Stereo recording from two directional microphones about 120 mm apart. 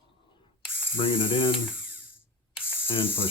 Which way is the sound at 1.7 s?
10° right (ahead or behind).